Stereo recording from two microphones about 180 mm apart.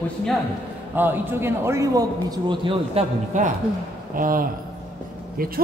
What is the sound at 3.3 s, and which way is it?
A man's voice, 40° right (ahead or behind).